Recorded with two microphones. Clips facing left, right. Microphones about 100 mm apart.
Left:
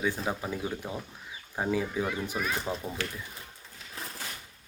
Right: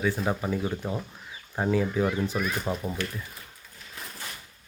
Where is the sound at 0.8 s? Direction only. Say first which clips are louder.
Right 5 dB; 20° right (ahead or behind).